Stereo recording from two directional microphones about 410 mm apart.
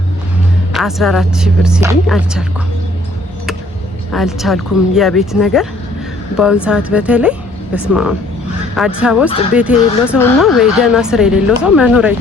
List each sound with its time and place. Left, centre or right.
0.7 s speech: centre
4.1 s speech: centre
8.7 s speech: centre